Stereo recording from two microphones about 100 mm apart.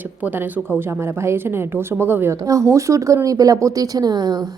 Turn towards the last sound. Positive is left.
turn(degrees=-45)  # may be behind; listen again after turning